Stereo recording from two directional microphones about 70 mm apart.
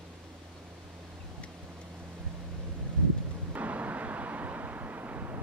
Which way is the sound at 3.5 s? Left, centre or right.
Right.